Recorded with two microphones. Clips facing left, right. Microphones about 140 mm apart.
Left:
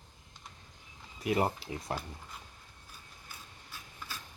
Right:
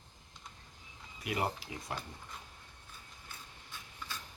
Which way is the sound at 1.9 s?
35° left (ahead or behind).